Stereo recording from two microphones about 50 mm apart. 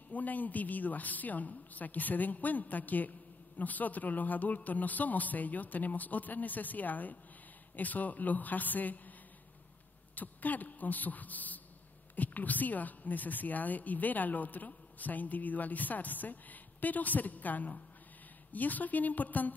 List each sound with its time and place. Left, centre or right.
0.1 s a woman's voice: left
10.1 s a woman's voice: left